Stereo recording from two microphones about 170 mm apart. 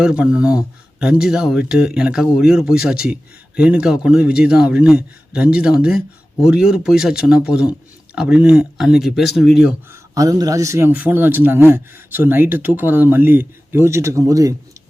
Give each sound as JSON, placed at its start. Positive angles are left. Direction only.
{"t": 0.0, "sound": "speech", "side_deg": -5}
{"t": 9.9, "sound": "a man's voice", "side_deg": -20}